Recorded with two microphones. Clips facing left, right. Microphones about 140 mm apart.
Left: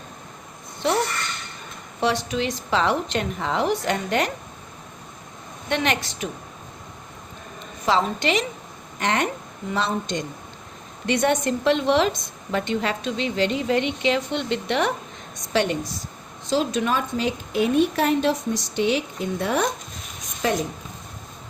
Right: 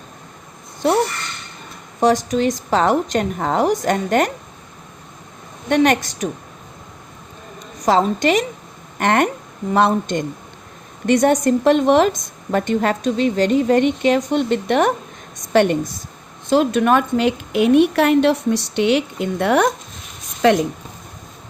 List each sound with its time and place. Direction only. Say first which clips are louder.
2.0 s a woman's voice: right 7 dB; 40° right (ahead or behind)
5.6 s a woman's voice: right 8 dB; 45° right (ahead or behind)
7.9 s a woman's voice: right 6 dB; 45° right (ahead or behind); by 20.6 s 75° right (ahead or behind)